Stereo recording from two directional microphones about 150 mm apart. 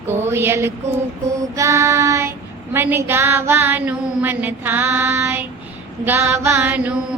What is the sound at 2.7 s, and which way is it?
Mantra, 15° right (ahead or behind).